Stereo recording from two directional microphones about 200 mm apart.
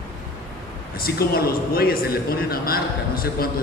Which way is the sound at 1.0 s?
50° left (ahead or behind).